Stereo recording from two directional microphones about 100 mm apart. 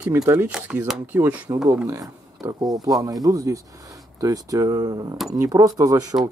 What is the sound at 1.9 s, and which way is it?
Speech, 35° right (ahead or behind).